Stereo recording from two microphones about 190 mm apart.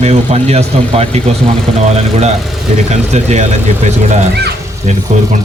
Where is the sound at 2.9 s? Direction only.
35° right (ahead or behind).